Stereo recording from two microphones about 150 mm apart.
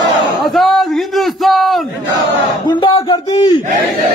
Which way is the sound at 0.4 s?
Centre (ahead or behind).